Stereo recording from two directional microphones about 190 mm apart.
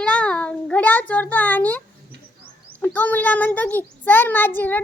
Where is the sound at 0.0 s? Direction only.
5° left (ahead or behind).